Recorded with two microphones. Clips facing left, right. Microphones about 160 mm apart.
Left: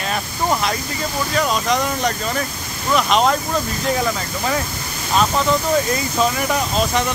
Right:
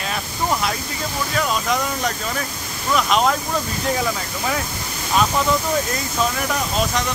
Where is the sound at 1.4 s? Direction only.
Centre (ahead or behind).